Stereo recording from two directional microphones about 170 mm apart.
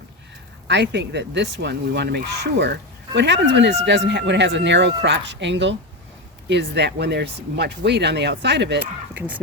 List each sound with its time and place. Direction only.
0.7 s speech: 90° right
3.2 s speech: 90° right
9.1 s speech: 10° right (ahead or behind)